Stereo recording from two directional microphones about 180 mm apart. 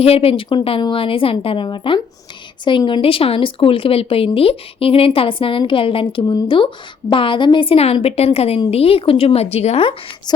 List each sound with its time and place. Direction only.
0.0 s a woman's voice: 35° left (ahead or behind)